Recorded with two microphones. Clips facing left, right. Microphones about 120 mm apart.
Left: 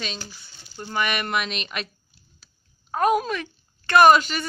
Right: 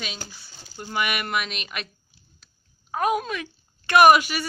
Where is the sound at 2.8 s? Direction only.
Centre (ahead or behind).